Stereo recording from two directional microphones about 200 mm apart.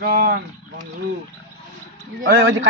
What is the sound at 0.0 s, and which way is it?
Speech, 50° right (ahead or behind).